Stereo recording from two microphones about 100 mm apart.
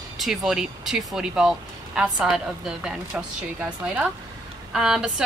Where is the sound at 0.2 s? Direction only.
5° right (ahead or behind).